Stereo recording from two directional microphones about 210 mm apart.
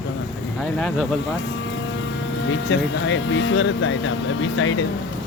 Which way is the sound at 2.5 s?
65° left (ahead or behind).